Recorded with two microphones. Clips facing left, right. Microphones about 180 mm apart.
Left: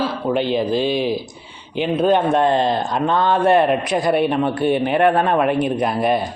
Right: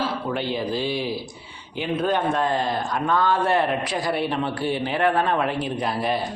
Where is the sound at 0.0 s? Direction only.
20° left (ahead or behind).